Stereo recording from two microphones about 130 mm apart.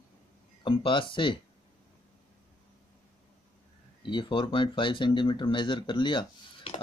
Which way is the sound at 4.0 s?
40° left (ahead or behind).